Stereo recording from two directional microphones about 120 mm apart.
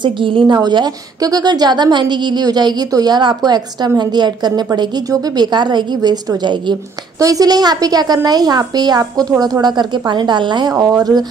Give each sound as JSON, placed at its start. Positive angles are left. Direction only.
{"t": 0.0, "sound": "a woman's voice", "side_deg": -45}
{"t": 10.7, "sound": "a woman's voice", "side_deg": -30}